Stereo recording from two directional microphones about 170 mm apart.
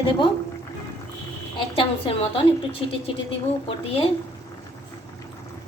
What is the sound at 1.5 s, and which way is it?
A woman's voice, 30° left (ahead or behind).